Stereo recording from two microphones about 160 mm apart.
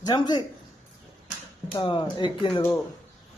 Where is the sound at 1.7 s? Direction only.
30° left (ahead or behind).